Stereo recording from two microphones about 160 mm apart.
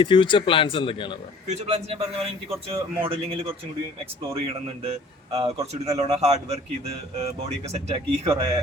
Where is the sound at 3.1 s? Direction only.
35° right (ahead or behind).